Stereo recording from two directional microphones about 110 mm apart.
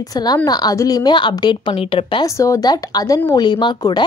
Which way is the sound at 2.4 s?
30° left (ahead or behind).